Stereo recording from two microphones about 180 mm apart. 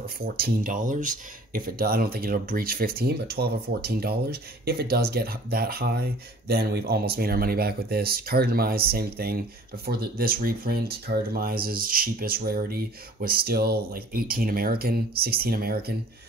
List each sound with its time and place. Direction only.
0.0 s speech: 55° right (ahead or behind)